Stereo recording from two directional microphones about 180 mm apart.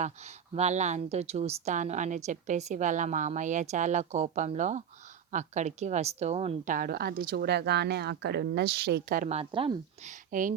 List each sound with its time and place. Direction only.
0.0 s a woman's voice: 40° right (ahead or behind)
6.7 s a woman's voice: 55° right (ahead or behind)
9.3 s a woman's voice: 30° right (ahead or behind)
10.1 s speech: 45° right (ahead or behind)